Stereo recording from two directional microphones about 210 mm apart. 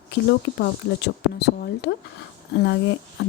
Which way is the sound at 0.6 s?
50° left (ahead or behind).